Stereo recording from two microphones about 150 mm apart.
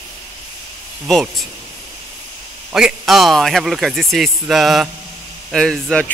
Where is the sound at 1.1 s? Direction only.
Centre (ahead or behind).